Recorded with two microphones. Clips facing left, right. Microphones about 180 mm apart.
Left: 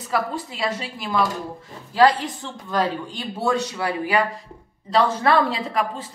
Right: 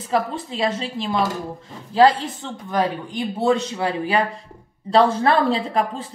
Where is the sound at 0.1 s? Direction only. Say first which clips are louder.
Right 3 dB; 30° right (ahead or behind).